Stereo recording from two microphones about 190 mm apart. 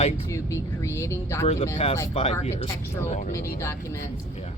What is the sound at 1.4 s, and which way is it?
Speech, 30° left (ahead or behind).